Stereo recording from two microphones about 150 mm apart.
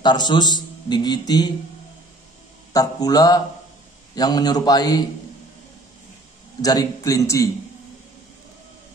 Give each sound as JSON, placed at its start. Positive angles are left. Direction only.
{"t": 0.0, "sound": "a man's voice", "side_deg": 30}
{"t": 2.7, "sound": "a man's voice", "side_deg": 25}
{"t": 6.6, "sound": "a man's voice", "side_deg": 25}